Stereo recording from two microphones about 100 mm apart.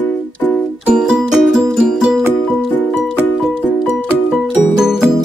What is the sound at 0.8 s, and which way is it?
Music, 5° right (ahead or behind).